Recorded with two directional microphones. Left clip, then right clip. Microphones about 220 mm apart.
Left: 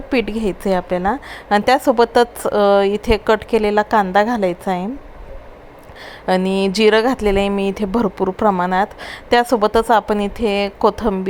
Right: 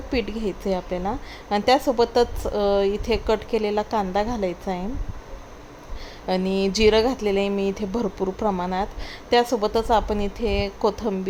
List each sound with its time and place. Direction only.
0.1 s speech: 20° left (ahead or behind)
6.2 s speech: 20° left (ahead or behind)